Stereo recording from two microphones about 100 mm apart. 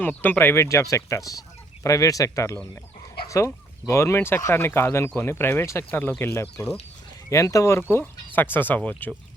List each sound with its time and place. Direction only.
0.0 s speech: 20° left (ahead or behind)
7.3 s speech: 35° left (ahead or behind); by 9.1 s 15° left (ahead or behind)